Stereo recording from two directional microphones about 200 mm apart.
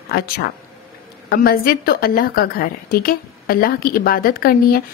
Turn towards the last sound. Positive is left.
turn(degrees=45)  # may be behind; listen again after turning